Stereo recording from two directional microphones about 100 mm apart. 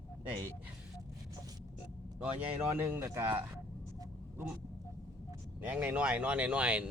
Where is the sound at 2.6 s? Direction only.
25° right (ahead or behind).